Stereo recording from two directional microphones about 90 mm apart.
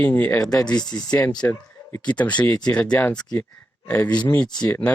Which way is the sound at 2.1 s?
15° left (ahead or behind).